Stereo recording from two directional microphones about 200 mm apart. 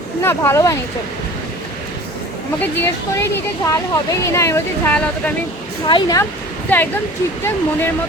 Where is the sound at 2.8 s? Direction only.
10° left (ahead or behind).